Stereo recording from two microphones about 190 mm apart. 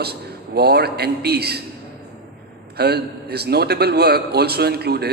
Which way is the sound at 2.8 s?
55° right (ahead or behind).